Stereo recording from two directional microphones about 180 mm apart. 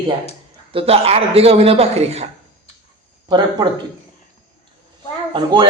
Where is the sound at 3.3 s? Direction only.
25° right (ahead or behind).